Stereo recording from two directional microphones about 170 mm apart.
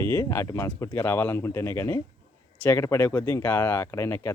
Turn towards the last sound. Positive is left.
turn(degrees=15)  # may be behind; listen again after turning